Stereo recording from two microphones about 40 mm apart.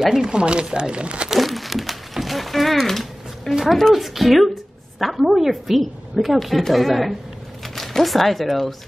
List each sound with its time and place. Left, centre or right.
0.0 s speech: centre
0.4 s speech: right
1.3 s crumpling: centre
3.7 s a woman's voice: centre